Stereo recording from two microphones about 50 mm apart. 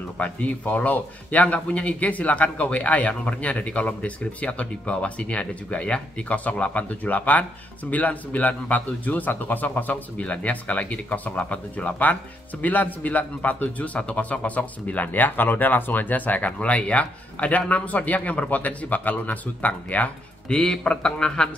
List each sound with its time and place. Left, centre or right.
0.2 s a man's voice: left
20.4 s speech: centre